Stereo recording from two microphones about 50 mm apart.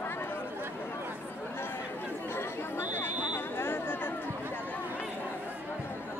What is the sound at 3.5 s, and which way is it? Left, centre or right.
Chatter, left.